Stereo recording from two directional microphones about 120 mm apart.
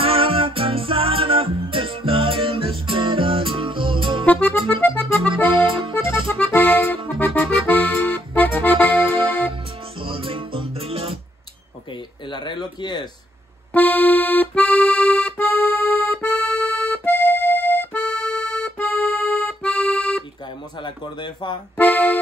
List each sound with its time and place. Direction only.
0.0 s music: 50° right (ahead or behind)
4.3 s accordion: 10° left (ahead or behind)
5.7 s accordion: 45° right (ahead or behind)
6.5 s accordion: 15° left (ahead or behind)
9.0 s music: 45° right (ahead or behind)
12.3 s a sound: 40° left (ahead or behind)
13.7 s accordion: 15° left (ahead or behind)
20.8 s a sound: 40° left (ahead or behind)
21.7 s music: 15° left (ahead or behind)